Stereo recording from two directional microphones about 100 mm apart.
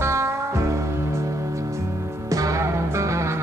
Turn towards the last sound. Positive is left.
turn(degrees=-30)  # may be behind; listen again after turning